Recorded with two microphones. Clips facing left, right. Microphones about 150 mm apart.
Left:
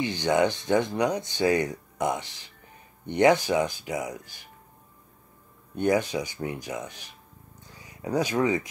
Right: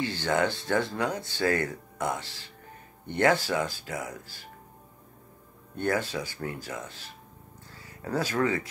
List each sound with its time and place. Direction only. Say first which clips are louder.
0.0 s speech: left 3 dB; 15° left (ahead or behind)
5.8 s speech: left 4 dB; 15° left (ahead or behind)